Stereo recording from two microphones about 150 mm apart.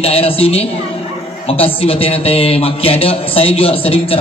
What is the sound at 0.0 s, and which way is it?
A man's voice, 40° left (ahead or behind).